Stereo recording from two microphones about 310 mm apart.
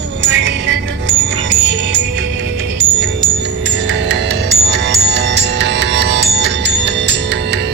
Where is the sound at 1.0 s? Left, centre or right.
Right.